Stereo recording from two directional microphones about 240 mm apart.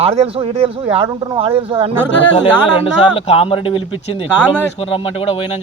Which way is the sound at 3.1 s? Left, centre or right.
Left.